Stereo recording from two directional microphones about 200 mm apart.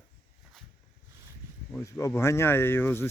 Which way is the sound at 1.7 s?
15° left (ahead or behind).